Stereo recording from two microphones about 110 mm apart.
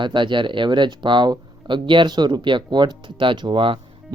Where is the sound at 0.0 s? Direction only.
45° right (ahead or behind).